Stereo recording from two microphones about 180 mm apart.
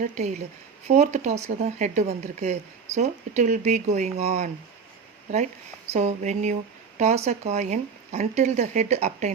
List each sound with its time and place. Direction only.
0.0 s speech: 40° right (ahead or behind)
5.9 s speech: 40° right (ahead or behind)